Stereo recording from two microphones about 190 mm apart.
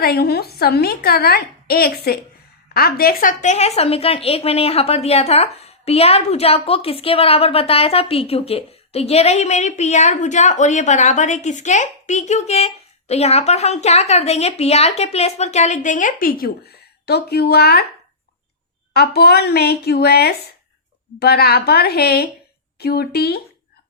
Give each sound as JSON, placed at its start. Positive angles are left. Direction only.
{"t": 0.0, "sound": "a woman's voice", "side_deg": 55}
{"t": 18.9, "sound": "a woman's voice", "side_deg": 55}